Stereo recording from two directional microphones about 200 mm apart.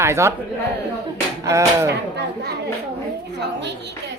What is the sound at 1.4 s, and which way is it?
Speech, 15° right (ahead or behind).